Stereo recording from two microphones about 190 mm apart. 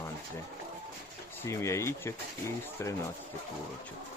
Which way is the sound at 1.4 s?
15° left (ahead or behind).